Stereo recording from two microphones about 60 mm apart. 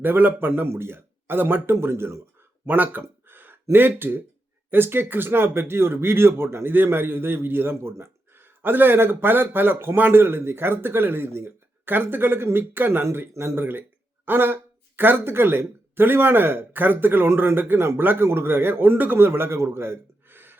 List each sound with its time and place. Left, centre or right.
0.0 s speech: right
2.6 s speech: right
13.6 s speech: right